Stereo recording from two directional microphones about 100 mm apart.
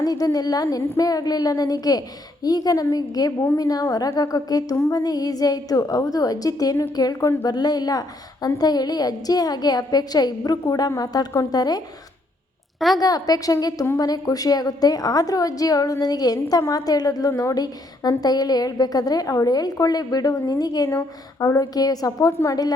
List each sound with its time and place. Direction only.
0.0 s a woman's voice: 40° left (ahead or behind)
13.0 s a woman's voice: 40° left (ahead or behind)